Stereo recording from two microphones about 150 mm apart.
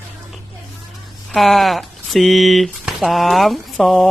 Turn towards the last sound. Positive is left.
turn(degrees=0)  # may be behind; listen again after turning